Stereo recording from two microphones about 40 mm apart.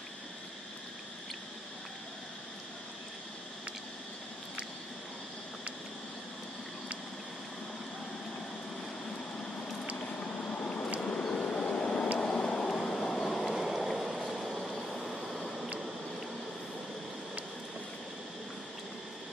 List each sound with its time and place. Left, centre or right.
9.9 s vehicle: left
11.0 s vehicle: left
12.2 s a sound: centre
13.3 s vehicle: centre
13.6 s a sound: centre
13.8 s vehicle: centre